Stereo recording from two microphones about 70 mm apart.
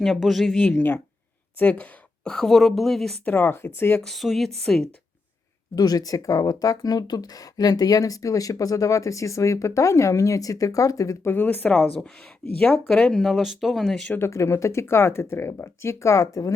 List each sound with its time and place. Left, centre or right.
0.0 s speech: centre
0.8 s a woman's voice: left; by 2.5 s centre
2.5 s speech: centre
3.2 s speech: left
4.0 s speech: centre
5.7 s speech: left
11.3 s speech: left
12.5 s speech: centre
14.3 s speech: left